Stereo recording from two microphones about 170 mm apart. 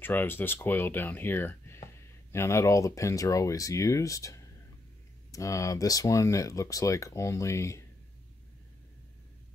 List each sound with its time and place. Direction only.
0.0 s speech: 10° left (ahead or behind)